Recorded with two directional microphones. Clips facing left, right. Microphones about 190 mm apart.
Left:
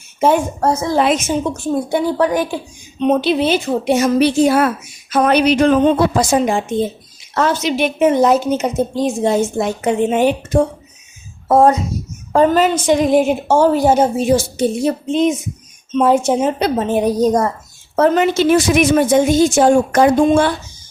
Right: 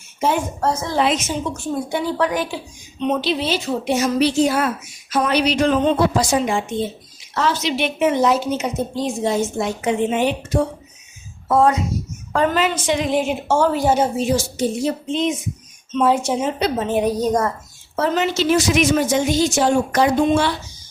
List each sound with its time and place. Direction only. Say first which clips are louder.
0.2 s a woman's voice: left 6 dB; 50° left (ahead or behind)
17.9 s a woman's voice: left 6 dB; 55° left (ahead or behind)